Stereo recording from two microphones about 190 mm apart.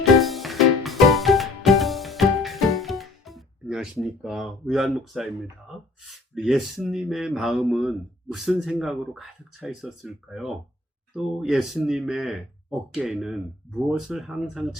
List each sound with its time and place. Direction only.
0.2 s music: centre (ahead or behind)
11.1 s speech: centre (ahead or behind)